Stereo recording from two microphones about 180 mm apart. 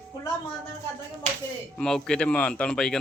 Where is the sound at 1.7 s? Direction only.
5° left (ahead or behind).